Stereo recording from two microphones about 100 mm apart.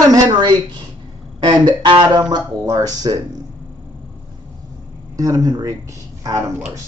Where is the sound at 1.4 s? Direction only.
50° right (ahead or behind).